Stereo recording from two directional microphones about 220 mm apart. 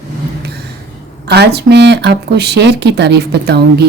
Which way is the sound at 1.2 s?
50° right (ahead or behind).